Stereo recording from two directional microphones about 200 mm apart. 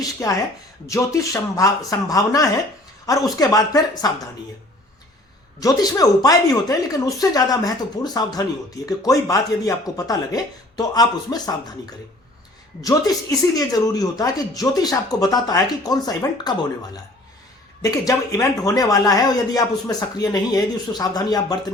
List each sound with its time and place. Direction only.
0.0 s speech: 15° left (ahead or behind)
5.5 s speech: 20° left (ahead or behind)
12.8 s speech: 20° left (ahead or behind)